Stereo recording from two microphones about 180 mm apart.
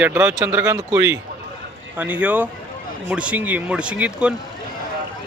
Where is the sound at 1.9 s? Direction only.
10° right (ahead or behind).